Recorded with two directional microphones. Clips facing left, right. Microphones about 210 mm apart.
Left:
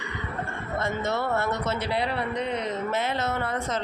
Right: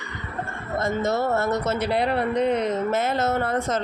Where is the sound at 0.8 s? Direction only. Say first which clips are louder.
Right 5 dB; 40° right (ahead or behind).